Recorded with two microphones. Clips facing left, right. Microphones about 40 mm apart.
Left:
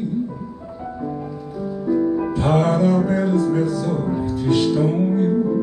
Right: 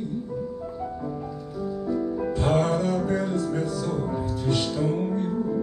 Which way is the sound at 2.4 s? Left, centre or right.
Left.